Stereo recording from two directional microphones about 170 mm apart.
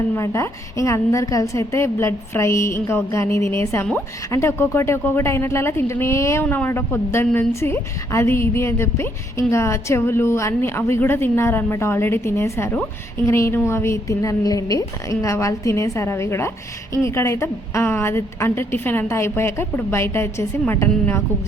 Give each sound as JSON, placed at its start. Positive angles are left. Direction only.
{"t": 0.2, "sound": "a woman's voice", "side_deg": 15}